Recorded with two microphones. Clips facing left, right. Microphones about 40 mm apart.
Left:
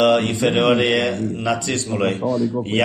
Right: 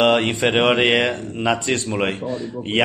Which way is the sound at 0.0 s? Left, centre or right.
Right.